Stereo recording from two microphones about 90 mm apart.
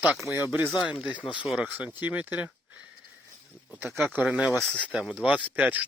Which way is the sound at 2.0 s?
20° right (ahead or behind).